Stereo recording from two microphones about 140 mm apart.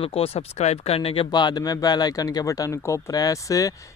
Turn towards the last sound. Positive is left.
turn(degrees=25)  # may be behind; listen again after turning